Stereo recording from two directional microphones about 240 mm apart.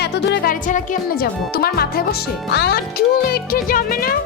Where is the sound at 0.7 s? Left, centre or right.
Left.